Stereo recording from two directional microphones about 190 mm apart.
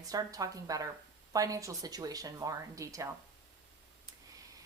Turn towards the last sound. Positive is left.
turn(degrees=-15)  # may be behind; listen again after turning